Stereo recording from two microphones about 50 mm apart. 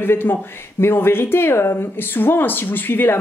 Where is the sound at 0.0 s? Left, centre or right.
Left.